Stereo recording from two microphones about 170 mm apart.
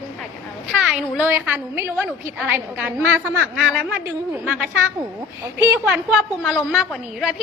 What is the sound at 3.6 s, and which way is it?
Speech, 5° left (ahead or behind).